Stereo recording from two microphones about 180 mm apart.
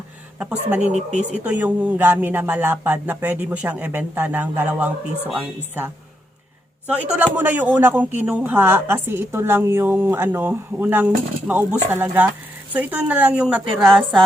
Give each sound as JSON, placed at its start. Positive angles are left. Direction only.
{"t": 0.3, "sound": "a woman's voice", "side_deg": -10}
{"t": 0.9, "sound": "speech", "side_deg": -40}
{"t": 1.5, "sound": "a woman's voice", "side_deg": -10}